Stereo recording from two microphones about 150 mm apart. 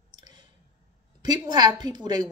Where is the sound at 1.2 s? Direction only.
30° right (ahead or behind).